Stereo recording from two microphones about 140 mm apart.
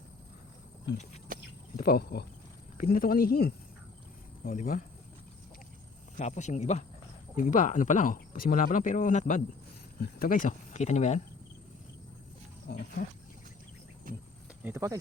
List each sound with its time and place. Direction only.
1.7 s speech: 90° left
4.4 s speech: 75° left (ahead or behind)
6.1 s speech: 55° left (ahead or behind)
10.2 s speech: 80° left; by 11.2 s 55° left (ahead or behind)
12.6 s speech: 90° left
14.6 s speech: 20° right (ahead or behind)